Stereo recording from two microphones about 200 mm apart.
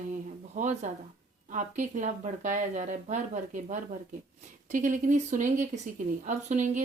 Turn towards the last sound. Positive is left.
turn(degrees=-35)  # may be behind; listen again after turning